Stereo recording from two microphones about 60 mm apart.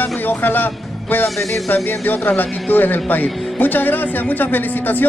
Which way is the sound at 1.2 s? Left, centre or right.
Centre.